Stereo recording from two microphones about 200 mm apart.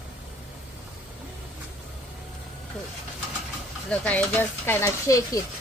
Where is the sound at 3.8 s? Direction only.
5° left (ahead or behind).